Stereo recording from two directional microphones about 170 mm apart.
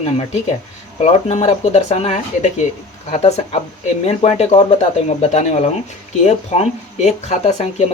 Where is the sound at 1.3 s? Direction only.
35° left (ahead or behind).